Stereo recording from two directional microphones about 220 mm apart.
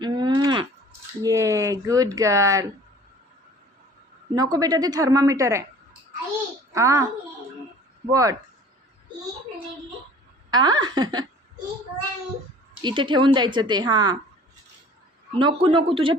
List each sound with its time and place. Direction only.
0.0 s a sound: 20° right (ahead or behind)
1.2 s speech: 15° right (ahead or behind)
4.4 s speech: 15° right (ahead or behind)
6.7 s speech: 15° right (ahead or behind)
8.1 s speech: 15° right (ahead or behind)
10.5 s a woman's voice: 20° right (ahead or behind)
12.8 s a woman's voice: 20° right (ahead or behind)
15.4 s a woman's voice: 20° right (ahead or behind)